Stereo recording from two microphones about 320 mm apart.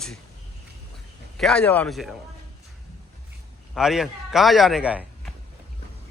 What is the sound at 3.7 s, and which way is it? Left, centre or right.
A man's voice, centre.